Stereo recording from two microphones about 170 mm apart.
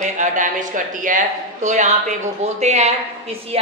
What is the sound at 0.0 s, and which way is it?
A man's voice, 50° right (ahead or behind).